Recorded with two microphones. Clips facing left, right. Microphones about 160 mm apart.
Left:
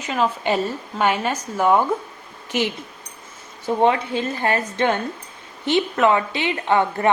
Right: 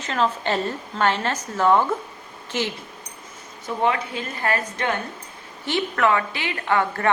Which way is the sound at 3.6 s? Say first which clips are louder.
Left 5 dB; 30° left (ahead or behind).